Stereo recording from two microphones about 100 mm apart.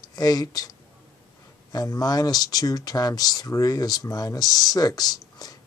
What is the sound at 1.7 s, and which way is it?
Speech, 40° left (ahead or behind).